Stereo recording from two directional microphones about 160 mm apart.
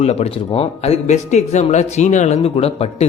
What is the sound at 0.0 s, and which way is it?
Speech, 40° left (ahead or behind).